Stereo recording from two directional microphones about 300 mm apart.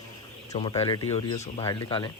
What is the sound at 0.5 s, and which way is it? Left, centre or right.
Mantra, centre.